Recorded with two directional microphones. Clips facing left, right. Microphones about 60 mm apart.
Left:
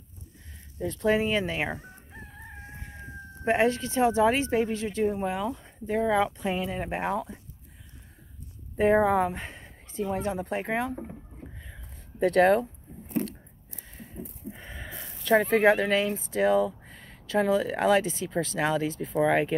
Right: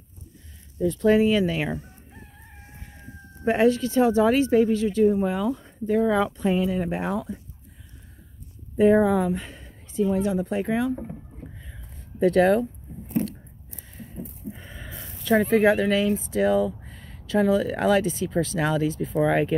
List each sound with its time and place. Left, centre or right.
1.0 s speech: left
3.4 s speech: left
6.8 s speech: left
8.7 s speech: left
9.5 s a sound: left
10.0 s speech: left
12.2 s speech: left
14.6 s a sound: left
15.2 s speech: left; by 19.5 s centre